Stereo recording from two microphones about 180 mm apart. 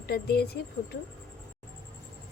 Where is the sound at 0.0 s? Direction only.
65° left (ahead or behind).